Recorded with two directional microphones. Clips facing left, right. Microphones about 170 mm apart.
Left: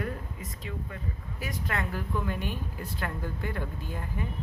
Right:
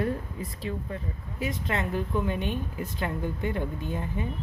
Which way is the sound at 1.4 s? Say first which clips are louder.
Right 4 dB; 20° right (ahead or behind).